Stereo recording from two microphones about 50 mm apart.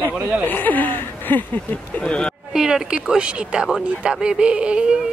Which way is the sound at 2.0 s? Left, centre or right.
Left.